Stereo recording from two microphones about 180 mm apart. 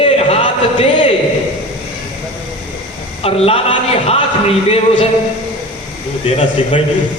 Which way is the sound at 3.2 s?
35° left (ahead or behind).